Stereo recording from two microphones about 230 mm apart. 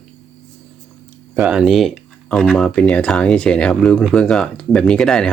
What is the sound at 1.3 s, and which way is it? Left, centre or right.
Speech, centre.